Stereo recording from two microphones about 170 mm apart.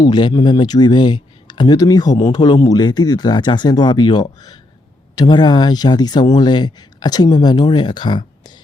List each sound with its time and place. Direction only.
0.0 s speech: 25° left (ahead or behind)